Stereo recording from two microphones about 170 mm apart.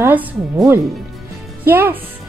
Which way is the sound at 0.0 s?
10° right (ahead or behind).